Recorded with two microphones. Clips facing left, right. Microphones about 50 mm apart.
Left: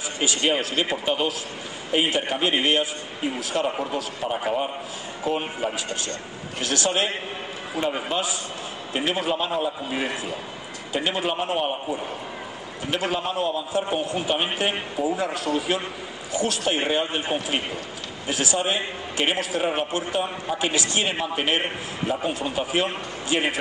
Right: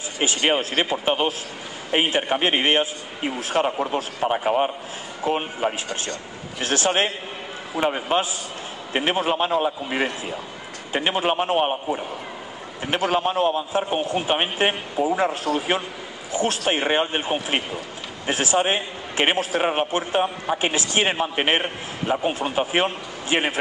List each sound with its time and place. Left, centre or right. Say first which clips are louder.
0.2 s a man's voice: right 2 dB; right